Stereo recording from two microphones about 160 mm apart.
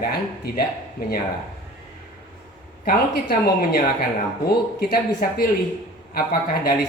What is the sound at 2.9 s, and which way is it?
Speech, 65° left (ahead or behind).